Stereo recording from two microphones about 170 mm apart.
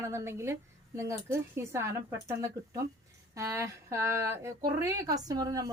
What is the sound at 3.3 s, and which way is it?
Speech, 15° right (ahead or behind).